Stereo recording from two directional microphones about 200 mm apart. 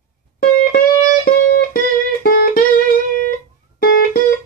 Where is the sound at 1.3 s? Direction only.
50° left (ahead or behind).